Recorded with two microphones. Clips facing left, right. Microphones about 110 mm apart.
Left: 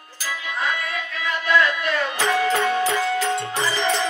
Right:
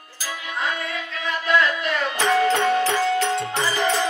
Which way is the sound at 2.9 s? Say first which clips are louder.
Right 2 dB; 30° right (ahead or behind).